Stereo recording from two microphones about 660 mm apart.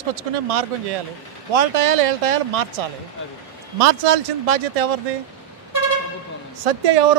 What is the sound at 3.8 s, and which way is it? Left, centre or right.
Speech, right.